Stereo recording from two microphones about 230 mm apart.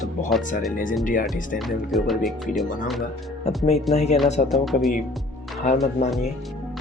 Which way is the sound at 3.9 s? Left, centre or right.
Left.